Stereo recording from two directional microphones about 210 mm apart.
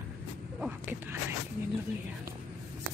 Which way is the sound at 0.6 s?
10° right (ahead or behind).